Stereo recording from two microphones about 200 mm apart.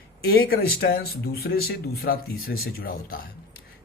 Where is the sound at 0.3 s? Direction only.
50° left (ahead or behind).